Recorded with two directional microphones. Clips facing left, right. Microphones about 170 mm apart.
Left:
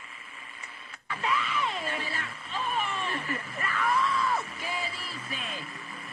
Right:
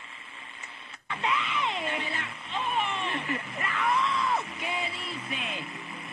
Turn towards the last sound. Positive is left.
turn(degrees=-20)  # may be behind; listen again after turning